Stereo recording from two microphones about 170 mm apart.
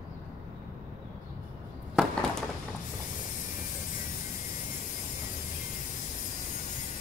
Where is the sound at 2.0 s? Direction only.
5° right (ahead or behind).